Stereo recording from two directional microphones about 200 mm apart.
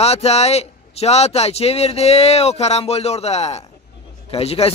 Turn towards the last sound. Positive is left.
turn(degrees=30)  # may be behind; listen again after turning